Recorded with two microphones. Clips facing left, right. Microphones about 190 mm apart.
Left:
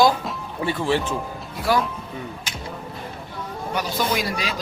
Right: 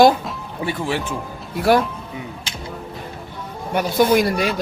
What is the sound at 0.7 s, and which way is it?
Speech, 15° right (ahead or behind).